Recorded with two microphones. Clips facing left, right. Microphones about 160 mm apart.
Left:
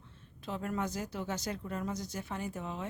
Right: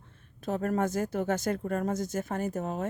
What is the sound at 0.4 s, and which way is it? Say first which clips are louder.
Speech: right 7 dB; 45° right (ahead or behind).